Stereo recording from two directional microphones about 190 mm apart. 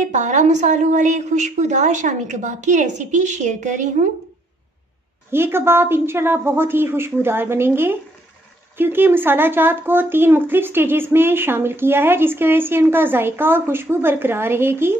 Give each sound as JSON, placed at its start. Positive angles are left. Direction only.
{"t": 0.0, "sound": "a woman's voice", "side_deg": -40}
{"t": 5.3, "sound": "speech", "side_deg": -10}